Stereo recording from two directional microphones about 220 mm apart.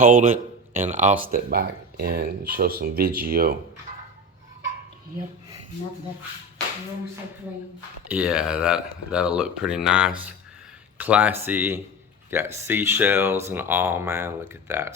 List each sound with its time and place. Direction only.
0.0 s speech: 35° right (ahead or behind)
8.1 s speech: 5° right (ahead or behind)